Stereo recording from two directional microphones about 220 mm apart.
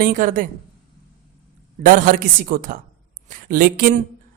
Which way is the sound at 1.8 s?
35° right (ahead or behind).